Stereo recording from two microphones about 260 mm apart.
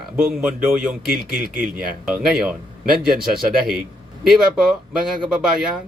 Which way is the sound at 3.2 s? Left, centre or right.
Right.